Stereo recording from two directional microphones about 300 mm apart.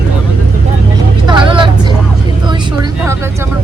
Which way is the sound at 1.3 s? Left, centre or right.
Centre.